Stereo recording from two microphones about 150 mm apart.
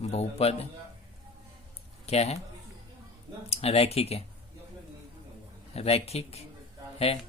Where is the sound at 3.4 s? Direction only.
45° left (ahead or behind).